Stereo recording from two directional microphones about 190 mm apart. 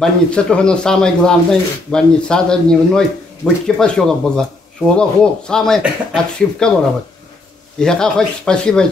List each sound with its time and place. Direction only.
0.0 s speech: 5° left (ahead or behind)
7.8 s speech: 5° left (ahead or behind)